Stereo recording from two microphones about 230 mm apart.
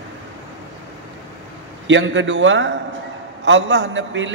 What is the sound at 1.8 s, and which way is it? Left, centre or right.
A man's voice, right.